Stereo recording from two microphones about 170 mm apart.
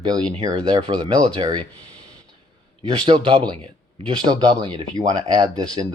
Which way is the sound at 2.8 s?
25° right (ahead or behind).